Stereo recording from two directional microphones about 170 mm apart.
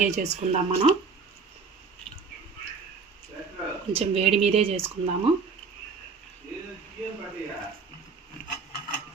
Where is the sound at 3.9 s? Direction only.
35° right (ahead or behind).